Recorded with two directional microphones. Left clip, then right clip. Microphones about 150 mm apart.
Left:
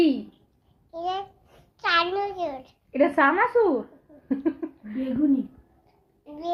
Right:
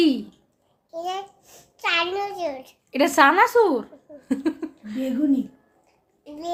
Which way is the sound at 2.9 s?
40° right (ahead or behind).